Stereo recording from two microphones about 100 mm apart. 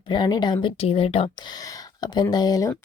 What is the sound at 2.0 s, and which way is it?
Speech, 45° left (ahead or behind).